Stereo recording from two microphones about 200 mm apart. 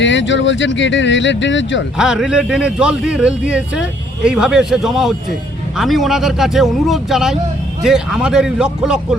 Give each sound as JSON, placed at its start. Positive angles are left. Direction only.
{"t": 0.0, "sound": "speech", "side_deg": 65}
{"t": 2.0, "sound": "a man's voice", "side_deg": -5}